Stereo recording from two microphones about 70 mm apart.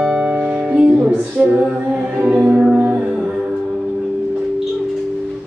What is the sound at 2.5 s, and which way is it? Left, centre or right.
Music, centre.